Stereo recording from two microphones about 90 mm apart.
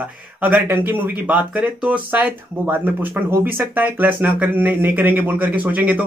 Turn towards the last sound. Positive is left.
turn(degrees=-15)  # may be behind; listen again after turning